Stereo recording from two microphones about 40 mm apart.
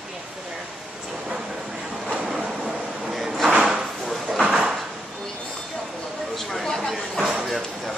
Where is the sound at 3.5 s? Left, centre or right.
Centre.